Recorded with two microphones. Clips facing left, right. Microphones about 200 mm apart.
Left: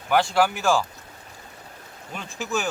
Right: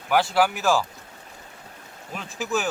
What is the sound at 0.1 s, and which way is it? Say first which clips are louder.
Speech: even; 5° right (ahead or behind).